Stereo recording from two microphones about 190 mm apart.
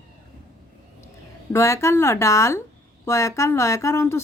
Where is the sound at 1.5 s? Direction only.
15° left (ahead or behind).